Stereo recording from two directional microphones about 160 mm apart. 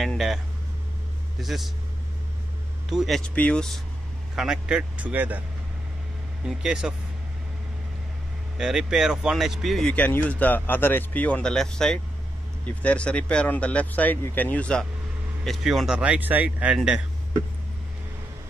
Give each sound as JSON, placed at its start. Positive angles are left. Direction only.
{"t": 0.0, "sound": "speech", "side_deg": 0}
{"t": 1.4, "sound": "speech", "side_deg": 0}
{"t": 2.9, "sound": "speech", "side_deg": 0}
{"t": 6.4, "sound": "speech", "side_deg": -5}
{"t": 8.5, "sound": "speech", "side_deg": -5}